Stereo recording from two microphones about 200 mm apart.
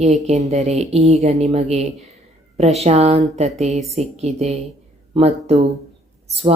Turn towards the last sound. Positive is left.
turn(degrees=-30)  # may be behind; listen again after turning